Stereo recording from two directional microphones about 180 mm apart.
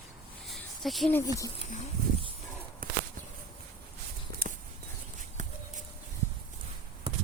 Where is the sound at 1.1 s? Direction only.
15° left (ahead or behind).